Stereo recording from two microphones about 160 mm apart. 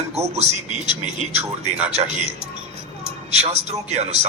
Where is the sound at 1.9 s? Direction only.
40° right (ahead or behind).